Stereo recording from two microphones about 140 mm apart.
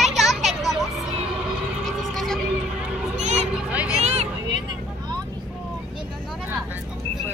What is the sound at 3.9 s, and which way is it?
Vehicle, 50° right (ahead or behind).